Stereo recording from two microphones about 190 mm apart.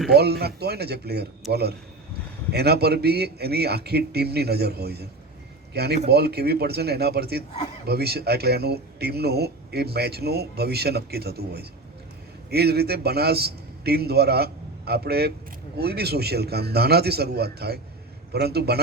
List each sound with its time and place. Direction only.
0.1 s a man's voice: 60° right (ahead or behind)